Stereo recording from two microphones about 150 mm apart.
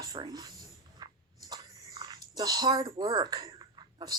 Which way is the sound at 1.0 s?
25° right (ahead or behind).